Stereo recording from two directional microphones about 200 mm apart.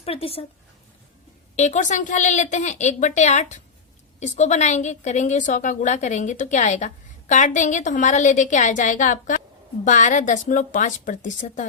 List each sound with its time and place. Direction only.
0.0 s speech: 30° left (ahead or behind)
1.5 s a woman's voice: 35° left (ahead or behind)